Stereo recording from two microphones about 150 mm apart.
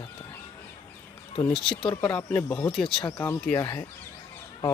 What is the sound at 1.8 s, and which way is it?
Speech, 35° left (ahead or behind).